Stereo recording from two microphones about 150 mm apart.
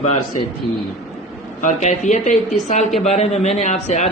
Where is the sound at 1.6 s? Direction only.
55° left (ahead or behind).